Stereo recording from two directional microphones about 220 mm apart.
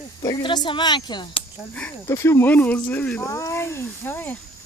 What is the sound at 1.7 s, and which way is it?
Speech, 10° left (ahead or behind).